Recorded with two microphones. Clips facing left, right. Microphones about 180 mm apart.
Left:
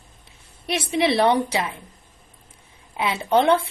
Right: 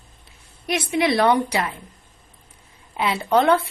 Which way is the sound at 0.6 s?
25° left (ahead or behind).